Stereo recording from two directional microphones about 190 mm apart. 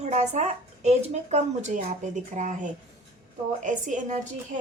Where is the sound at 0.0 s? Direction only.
40° right (ahead or behind).